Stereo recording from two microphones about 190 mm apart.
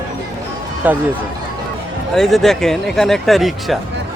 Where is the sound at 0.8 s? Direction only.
10° right (ahead or behind).